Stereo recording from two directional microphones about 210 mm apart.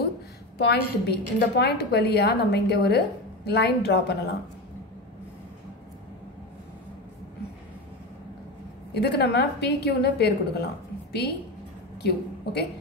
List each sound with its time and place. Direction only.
0.6 s a woman's voice: 50° left (ahead or behind)
8.9 s a woman's voice: 50° left (ahead or behind)
12.0 s a woman's voice: 50° left (ahead or behind)